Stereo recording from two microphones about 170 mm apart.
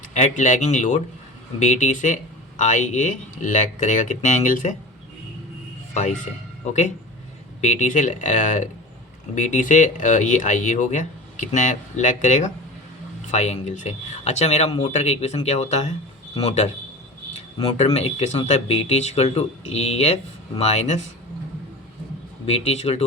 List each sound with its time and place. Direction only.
0.1 s speech: 45° left (ahead or behind)
5.9 s speech: 45° left (ahead or behind)
7.6 s speech: 45° left (ahead or behind)
17.7 s speech: 40° left (ahead or behind)
22.4 s speech: 35° left (ahead or behind)